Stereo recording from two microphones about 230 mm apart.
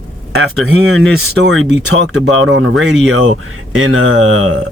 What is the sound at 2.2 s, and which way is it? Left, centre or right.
Speech, right.